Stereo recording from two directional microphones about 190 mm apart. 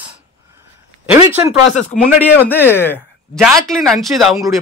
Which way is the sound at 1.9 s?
40° left (ahead or behind).